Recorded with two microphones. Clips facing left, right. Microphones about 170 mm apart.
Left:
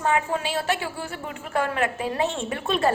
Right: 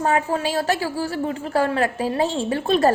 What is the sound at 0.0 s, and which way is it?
A woman's voice, 40° right (ahead or behind).